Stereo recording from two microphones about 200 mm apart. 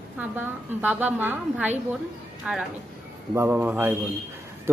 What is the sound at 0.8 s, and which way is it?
A man's voice, 5° right (ahead or behind).